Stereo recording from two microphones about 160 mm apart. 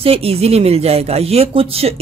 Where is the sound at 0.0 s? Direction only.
35° right (ahead or behind).